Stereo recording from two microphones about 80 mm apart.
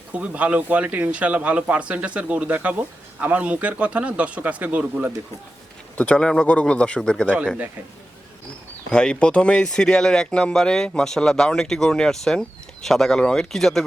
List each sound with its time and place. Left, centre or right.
0.1 s a man's voice: centre
6.0 s speech: centre
8.9 s speech: centre